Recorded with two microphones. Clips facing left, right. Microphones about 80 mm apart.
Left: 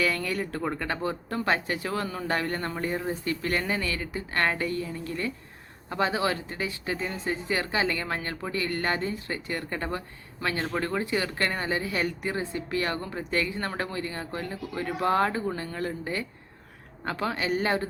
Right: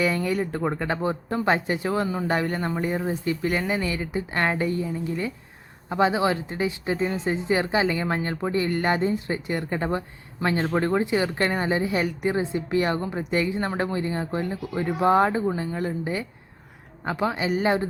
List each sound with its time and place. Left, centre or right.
0.0 s speech: right